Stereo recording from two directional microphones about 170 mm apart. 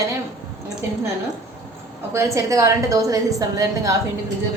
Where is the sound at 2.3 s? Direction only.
20° right (ahead or behind).